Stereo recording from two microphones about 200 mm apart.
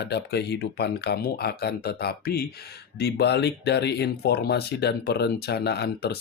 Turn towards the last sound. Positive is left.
turn(degrees=55)  # may be behind; listen again after turning